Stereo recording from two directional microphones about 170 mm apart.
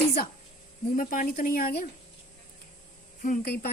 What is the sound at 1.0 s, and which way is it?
Speech, 55° left (ahead or behind).